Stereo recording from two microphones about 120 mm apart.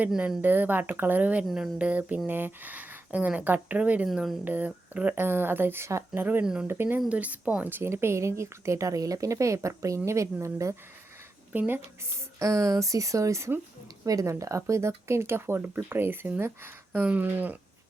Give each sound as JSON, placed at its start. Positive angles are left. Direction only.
{"t": 0.2, "sound": "speech", "side_deg": -15}
{"t": 1.5, "sound": "a sound", "side_deg": 0}
{"t": 1.8, "sound": "speech", "side_deg": -10}
{"t": 6.4, "sound": "speech", "side_deg": -5}
{"t": 6.7, "sound": "speech", "side_deg": -20}